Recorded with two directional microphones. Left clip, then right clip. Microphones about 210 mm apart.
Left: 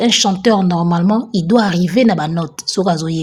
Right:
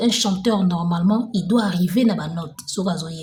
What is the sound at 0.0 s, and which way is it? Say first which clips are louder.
A woman's voice: left 7 dB; 30° left (ahead or behind).